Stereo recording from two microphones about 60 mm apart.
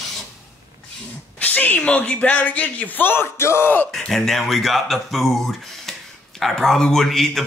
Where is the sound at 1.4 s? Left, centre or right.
Left.